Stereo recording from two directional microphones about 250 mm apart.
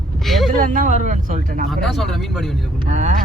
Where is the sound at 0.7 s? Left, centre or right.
Right.